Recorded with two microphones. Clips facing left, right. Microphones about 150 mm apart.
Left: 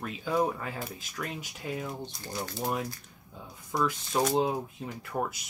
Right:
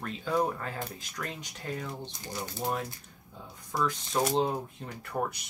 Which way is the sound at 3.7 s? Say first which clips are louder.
Left 1 dB; 5° left (ahead or behind).